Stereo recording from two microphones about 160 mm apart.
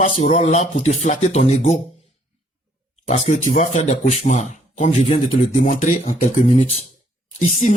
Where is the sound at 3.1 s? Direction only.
45° left (ahead or behind).